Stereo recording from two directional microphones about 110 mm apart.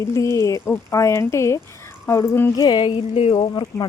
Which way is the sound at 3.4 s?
45° left (ahead or behind).